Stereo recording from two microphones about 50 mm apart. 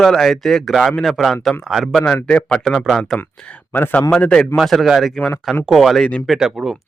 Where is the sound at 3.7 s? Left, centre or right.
Left.